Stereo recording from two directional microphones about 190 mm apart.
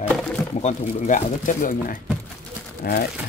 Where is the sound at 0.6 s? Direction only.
40° left (ahead or behind).